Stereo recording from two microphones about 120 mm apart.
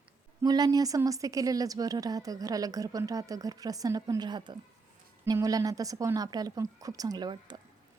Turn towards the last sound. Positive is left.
turn(degrees=-35)  # may be behind; listen again after turning